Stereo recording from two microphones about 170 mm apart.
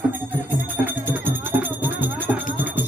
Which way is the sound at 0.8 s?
10° right (ahead or behind).